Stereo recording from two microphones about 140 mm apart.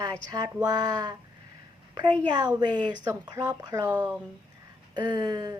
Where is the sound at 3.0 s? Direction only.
25° right (ahead or behind).